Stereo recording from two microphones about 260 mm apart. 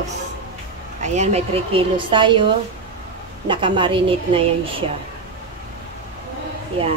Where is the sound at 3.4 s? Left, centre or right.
Centre.